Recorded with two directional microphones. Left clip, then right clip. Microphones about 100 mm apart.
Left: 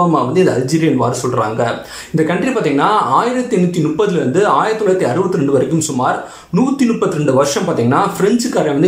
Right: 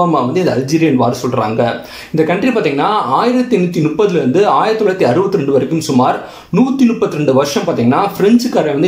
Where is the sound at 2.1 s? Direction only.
20° right (ahead or behind).